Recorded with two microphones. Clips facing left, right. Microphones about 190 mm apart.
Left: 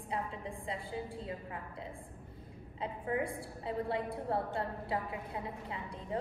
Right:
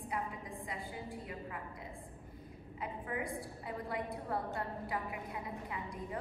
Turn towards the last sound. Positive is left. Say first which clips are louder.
# left 2 dB
turn(degrees=25)  # may be behind; listen again after turning